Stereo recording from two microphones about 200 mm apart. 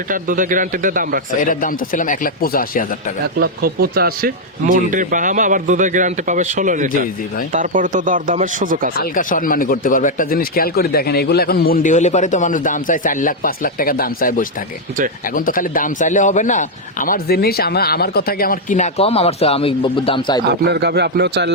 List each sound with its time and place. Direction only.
0.1 s speech: 40° right (ahead or behind)
1.4 s speech: 40° left (ahead or behind)
3.3 s speech: 50° right (ahead or behind)
9.0 s a man's voice: 45° left (ahead or behind); by 20.4 s 25° left (ahead or behind)
20.4 s a man's voice: 55° right (ahead or behind)